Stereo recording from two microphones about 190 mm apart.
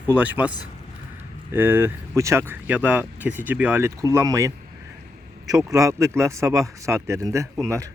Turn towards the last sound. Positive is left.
turn(degrees=-15)  # may be behind; listen again after turning